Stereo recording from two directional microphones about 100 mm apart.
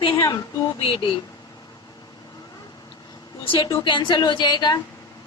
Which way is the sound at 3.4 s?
50° left (ahead or behind).